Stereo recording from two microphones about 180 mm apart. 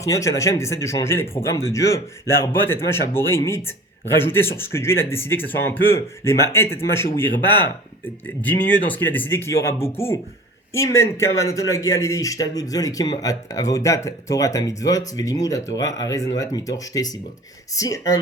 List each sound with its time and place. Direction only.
0.0 s a man's voice: 20° left (ahead or behind)
8.9 s a man's voice: 10° left (ahead or behind)
10.8 s a man's voice: 15° left (ahead or behind)